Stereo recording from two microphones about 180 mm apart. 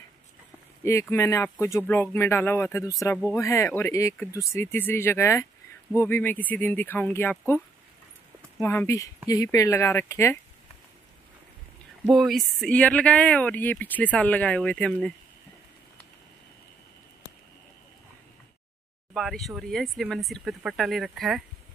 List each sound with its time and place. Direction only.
1.1 s speech: 15° left (ahead or behind)
12.1 s speech: centre (ahead or behind)
19.1 s speech: centre (ahead or behind)